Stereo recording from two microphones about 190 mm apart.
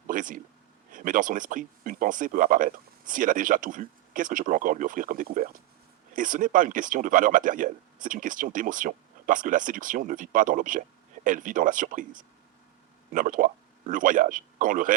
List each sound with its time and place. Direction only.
0.1 s speech: 45° right (ahead or behind)